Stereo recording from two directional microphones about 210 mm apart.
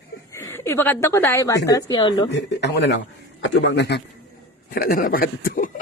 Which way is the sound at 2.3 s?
55° left (ahead or behind).